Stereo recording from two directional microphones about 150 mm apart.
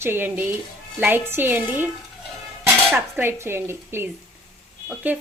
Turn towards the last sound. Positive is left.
turn(degrees=-5)  # may be behind; listen again after turning